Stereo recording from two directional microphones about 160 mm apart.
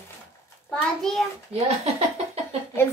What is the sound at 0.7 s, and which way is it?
Speech, 5° left (ahead or behind).